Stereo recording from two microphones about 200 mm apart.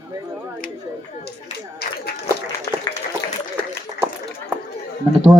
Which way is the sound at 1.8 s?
55° left (ahead or behind).